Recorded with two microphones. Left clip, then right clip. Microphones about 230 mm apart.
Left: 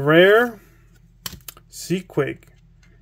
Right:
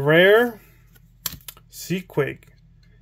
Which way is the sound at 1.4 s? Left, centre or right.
Centre.